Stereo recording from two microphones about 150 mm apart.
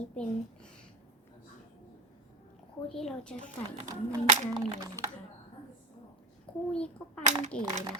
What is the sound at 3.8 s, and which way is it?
Speech, 20° right (ahead or behind).